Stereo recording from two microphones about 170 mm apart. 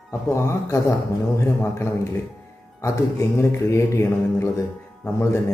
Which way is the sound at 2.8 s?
15° left (ahead or behind).